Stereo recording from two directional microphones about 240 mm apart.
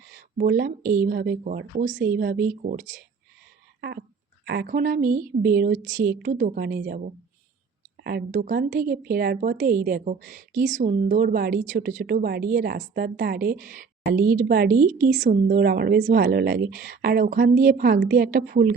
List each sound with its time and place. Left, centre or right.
0.3 s a woman's voice: right
3.8 s a sound: right
4.4 s a woman's voice: right